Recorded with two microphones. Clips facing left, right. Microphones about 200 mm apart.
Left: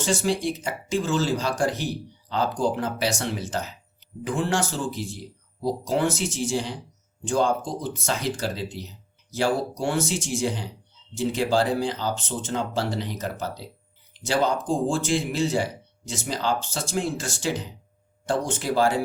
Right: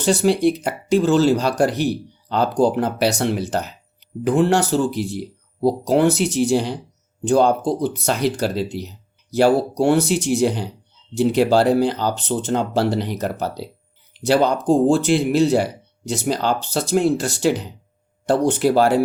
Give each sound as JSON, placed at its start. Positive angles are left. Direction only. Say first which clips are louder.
{"t": 0.0, "sound": "speech", "louder": "right 8 dB", "side_deg": -65}